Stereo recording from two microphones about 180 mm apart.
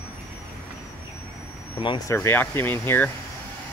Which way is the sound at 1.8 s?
25° left (ahead or behind).